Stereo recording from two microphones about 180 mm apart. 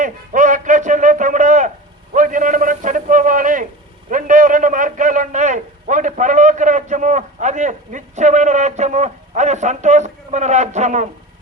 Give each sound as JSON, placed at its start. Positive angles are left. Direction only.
{"t": 0.0, "sound": "music", "side_deg": -45}
{"t": 2.1, "sound": "a sound", "side_deg": -45}
{"t": 4.1, "sound": "a man's voice", "side_deg": -45}